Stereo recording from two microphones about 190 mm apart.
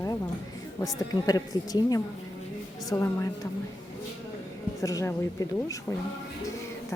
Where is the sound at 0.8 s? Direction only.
20° left (ahead or behind).